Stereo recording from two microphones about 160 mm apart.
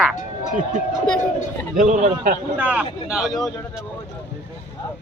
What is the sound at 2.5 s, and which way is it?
Speech, 10° right (ahead or behind).